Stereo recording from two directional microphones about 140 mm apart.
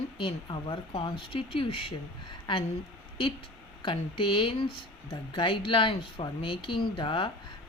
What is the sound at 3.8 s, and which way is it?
Speech, 35° left (ahead or behind).